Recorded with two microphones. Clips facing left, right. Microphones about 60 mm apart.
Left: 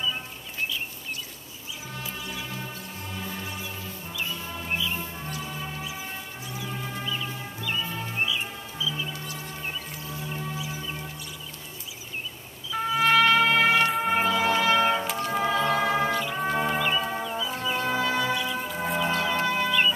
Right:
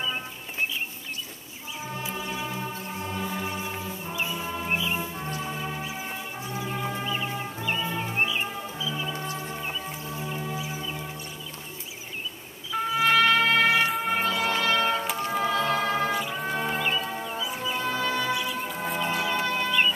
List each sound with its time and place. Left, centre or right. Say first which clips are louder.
2.0 s music: right 3 dB; right
3.1 s music: right 4 dB; centre
3.4 s music: right 4 dB; right
7.1 s music: right 3 dB; right
12.9 s music: left 1 dB; centre
14.0 s music: left 2 dB; centre
16.1 s music: left 1 dB; centre
16.3 s music: left 3 dB; centre
17.2 s music: left 1 dB; centre
17.6 s music: left 2 dB; centre
18.3 s music: left 1 dB; centre
19.4 s music: left 2 dB; centre